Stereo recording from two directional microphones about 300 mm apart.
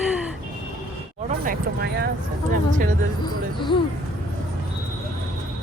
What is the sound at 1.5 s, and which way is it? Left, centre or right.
Speech, right.